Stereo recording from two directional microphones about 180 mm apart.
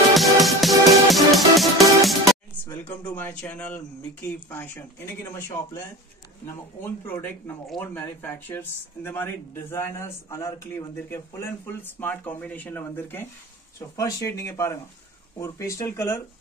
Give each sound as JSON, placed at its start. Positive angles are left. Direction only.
{"t": 0.1, "sound": "music", "side_deg": 0}
{"t": 2.6, "sound": "speech", "side_deg": 10}